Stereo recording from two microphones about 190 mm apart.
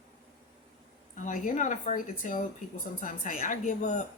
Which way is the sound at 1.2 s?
45° left (ahead or behind).